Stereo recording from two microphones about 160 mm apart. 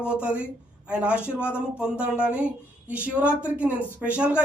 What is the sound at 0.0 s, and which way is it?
Speech, 5° right (ahead or behind).